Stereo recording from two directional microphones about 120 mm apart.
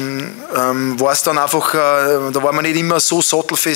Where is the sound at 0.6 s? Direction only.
25° left (ahead or behind).